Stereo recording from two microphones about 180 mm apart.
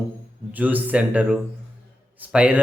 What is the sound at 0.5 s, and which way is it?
Speech, 10° right (ahead or behind).